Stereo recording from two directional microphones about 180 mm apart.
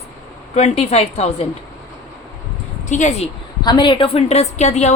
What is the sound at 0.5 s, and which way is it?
Speech, 35° left (ahead or behind).